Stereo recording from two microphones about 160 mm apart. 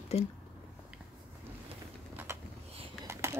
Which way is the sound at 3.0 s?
15° right (ahead or behind).